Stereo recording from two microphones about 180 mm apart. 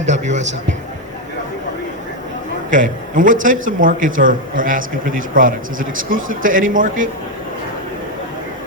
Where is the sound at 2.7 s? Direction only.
45° right (ahead or behind).